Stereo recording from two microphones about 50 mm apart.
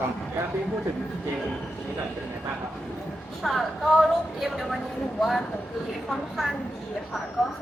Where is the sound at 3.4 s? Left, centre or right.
Centre.